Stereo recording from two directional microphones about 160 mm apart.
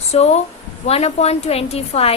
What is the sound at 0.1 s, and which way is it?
Speech, 40° left (ahead or behind).